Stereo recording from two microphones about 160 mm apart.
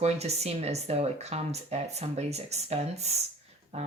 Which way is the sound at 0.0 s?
40° right (ahead or behind).